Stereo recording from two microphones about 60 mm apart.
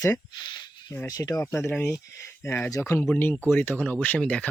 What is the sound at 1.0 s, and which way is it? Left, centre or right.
Speech, left.